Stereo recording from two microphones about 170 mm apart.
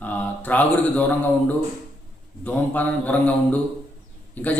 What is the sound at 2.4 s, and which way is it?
A man's voice, 10° left (ahead or behind).